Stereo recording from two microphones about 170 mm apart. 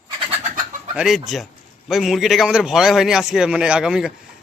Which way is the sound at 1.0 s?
Centre (ahead or behind).